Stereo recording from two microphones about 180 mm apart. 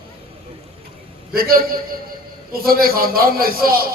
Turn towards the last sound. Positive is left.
turn(degrees=-55)  # may be behind; listen again after turning